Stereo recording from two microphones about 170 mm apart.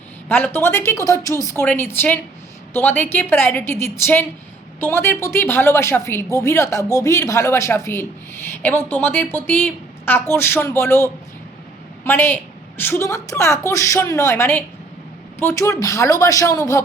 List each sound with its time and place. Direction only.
0.3 s a woman's voice: 10° left (ahead or behind)